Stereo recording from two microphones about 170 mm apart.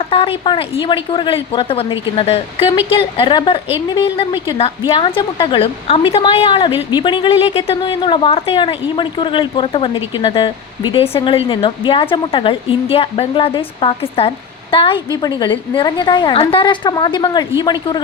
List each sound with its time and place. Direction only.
0.0 s a woman's voice: 35° left (ahead or behind)